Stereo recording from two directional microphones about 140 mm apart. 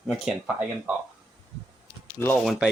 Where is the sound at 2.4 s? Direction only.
Centre (ahead or behind).